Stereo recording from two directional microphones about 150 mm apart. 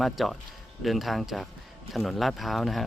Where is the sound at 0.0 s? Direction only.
Centre (ahead or behind).